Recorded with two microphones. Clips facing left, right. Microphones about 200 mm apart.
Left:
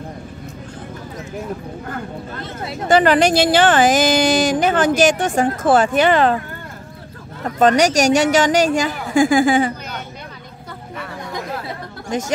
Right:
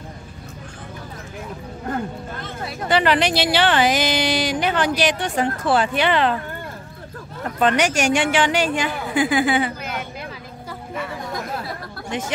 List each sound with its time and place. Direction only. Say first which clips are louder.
2.9 s speech: left 5 dB; 45° left (ahead or behind)
7.5 s a woman's voice: left 5 dB; 40° left (ahead or behind)
12.1 s a woman's voice: left 5 dB; 40° left (ahead or behind)